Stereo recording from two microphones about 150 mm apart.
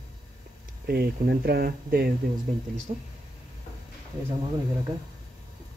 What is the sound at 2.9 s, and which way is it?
Speech, 55° right (ahead or behind).